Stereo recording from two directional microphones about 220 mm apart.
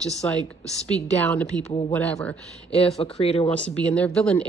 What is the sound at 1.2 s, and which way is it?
Speech, 5° left (ahead or behind).